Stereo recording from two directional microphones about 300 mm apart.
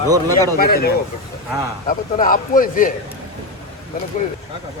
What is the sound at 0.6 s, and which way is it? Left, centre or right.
Speech, left.